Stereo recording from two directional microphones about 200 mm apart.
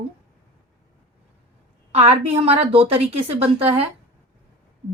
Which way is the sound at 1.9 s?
30° right (ahead or behind).